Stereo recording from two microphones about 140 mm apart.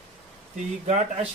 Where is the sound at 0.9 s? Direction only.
60° right (ahead or behind).